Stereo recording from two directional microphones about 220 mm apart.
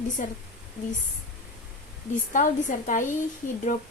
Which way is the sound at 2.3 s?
35° left (ahead or behind).